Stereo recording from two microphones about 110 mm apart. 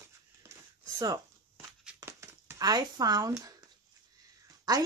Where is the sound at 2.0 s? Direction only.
25° right (ahead or behind).